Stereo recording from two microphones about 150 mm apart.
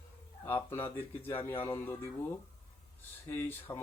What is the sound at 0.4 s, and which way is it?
Speech, 15° left (ahead or behind).